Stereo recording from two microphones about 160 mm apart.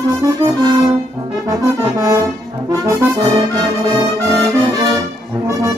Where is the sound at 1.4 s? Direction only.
20° right (ahead or behind).